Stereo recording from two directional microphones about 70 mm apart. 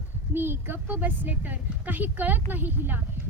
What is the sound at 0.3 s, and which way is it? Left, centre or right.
A woman's voice, right.